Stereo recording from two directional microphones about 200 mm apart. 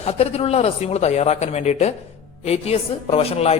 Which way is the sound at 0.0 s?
30° left (ahead or behind).